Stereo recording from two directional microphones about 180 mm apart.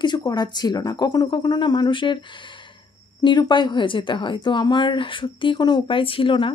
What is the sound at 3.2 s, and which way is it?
Speech, 25° left (ahead or behind).